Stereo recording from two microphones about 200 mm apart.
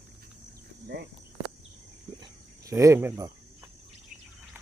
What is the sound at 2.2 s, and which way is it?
Cricket, 15° right (ahead or behind).